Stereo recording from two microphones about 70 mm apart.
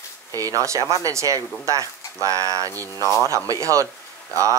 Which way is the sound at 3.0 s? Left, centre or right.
Left.